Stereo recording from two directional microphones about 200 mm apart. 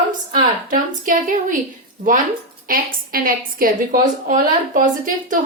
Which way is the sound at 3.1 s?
45° right (ahead or behind).